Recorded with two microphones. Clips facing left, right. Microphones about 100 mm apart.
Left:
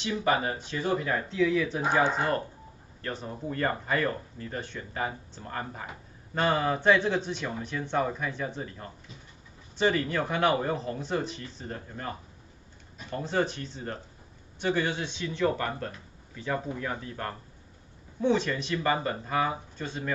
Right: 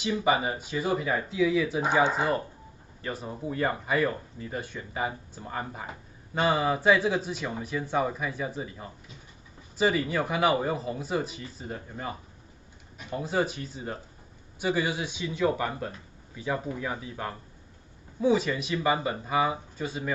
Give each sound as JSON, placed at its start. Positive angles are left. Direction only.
{"t": 0.0, "sound": "speech", "side_deg": -10}
{"t": 1.8, "sound": "speech", "side_deg": -15}